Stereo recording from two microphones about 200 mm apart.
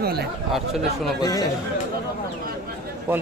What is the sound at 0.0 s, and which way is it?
Speech, 50° right (ahead or behind).